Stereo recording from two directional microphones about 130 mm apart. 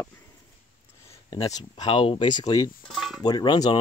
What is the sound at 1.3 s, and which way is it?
Speech, 30° left (ahead or behind).